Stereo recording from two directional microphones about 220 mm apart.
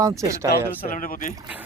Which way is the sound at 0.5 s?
40° left (ahead or behind).